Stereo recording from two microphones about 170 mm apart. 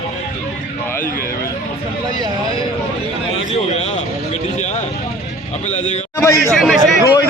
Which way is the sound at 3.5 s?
40° left (ahead or behind).